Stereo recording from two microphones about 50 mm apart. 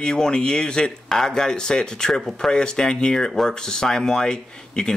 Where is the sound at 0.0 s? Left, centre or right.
Centre.